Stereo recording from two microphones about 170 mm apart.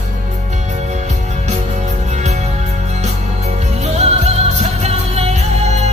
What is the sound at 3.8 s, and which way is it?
Music, 40° right (ahead or behind).